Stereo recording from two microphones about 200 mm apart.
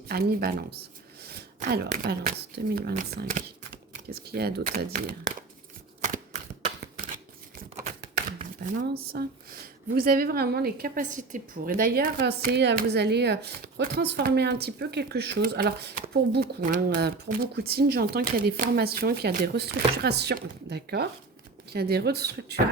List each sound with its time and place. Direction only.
0.1 s a woman's voice: 50° right (ahead or behind)
1.2 s throat clearing: 50° right (ahead or behind)
2.7 s a woman's voice: 45° right (ahead or behind)
6.0 s shuffling cards: 35° right (ahead or behind)
8.8 s a woman's voice: 50° right (ahead or behind)